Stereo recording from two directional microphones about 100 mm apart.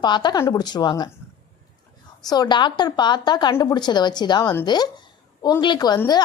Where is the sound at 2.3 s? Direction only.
45° left (ahead or behind).